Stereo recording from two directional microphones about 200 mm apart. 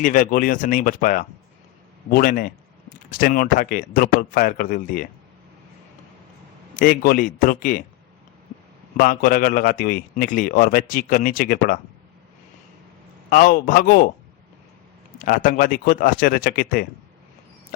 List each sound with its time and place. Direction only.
0.0 s a man's voice: 40° left (ahead or behind)
6.7 s a man's voice: 45° left (ahead or behind)
9.0 s a man's voice: 45° left (ahead or behind)
13.3 s a man's voice: 45° left (ahead or behind)
15.2 s a man's voice: 40° left (ahead or behind)